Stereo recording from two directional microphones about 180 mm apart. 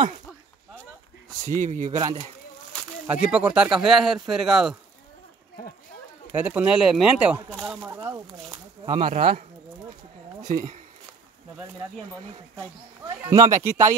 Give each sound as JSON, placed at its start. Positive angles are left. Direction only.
{"t": 1.6, "sound": "speech", "side_deg": -45}
{"t": 2.0, "sound": "speech", "side_deg": -25}
{"t": 3.1, "sound": "speech", "side_deg": -5}
{"t": 6.3, "sound": "speech", "side_deg": -10}
{"t": 7.9, "sound": "speech", "side_deg": -15}
{"t": 9.0, "sound": "speech", "side_deg": -50}
{"t": 13.0, "sound": "speech", "side_deg": -20}